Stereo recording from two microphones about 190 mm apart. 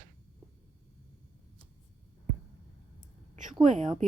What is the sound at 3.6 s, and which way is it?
Speech, 40° right (ahead or behind).